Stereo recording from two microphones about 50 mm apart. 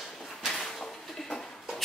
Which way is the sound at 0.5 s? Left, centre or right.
Centre.